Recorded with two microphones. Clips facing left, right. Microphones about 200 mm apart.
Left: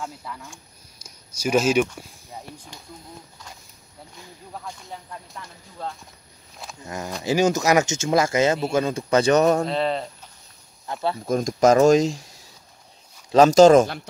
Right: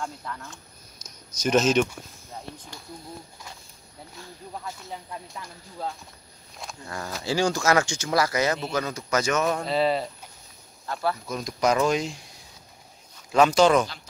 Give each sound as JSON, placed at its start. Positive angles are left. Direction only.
{"t": 0.0, "sound": "speech", "side_deg": 5}
{"t": 5.3, "sound": "speech", "side_deg": 0}
{"t": 6.8, "sound": "speech", "side_deg": 20}
{"t": 9.7, "sound": "speech", "side_deg": -5}
{"t": 10.9, "sound": "speech", "side_deg": 20}
{"t": 11.2, "sound": "speech", "side_deg": 45}
{"t": 13.3, "sound": "speech", "side_deg": 40}